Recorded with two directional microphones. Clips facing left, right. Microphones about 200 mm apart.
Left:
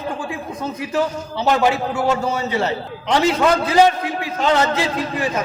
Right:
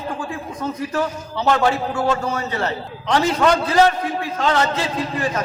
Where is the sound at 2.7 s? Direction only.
15° left (ahead or behind).